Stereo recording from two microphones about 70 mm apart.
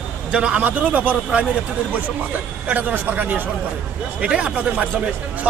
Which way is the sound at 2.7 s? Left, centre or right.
Right.